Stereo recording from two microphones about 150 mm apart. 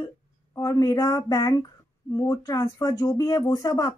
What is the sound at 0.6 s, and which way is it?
Speech, 25° left (ahead or behind).